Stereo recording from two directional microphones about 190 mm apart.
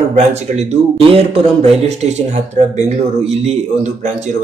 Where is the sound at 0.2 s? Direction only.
35° right (ahead or behind).